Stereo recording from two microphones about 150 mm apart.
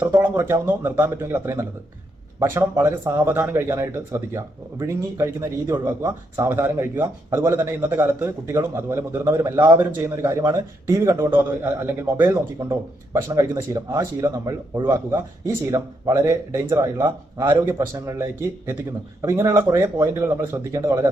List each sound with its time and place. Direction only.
0.0 s speech: 15° right (ahead or behind)
9.6 s speech: 30° right (ahead or behind)